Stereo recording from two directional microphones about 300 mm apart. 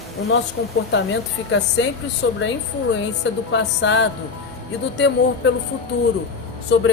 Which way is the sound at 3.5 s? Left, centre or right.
Left.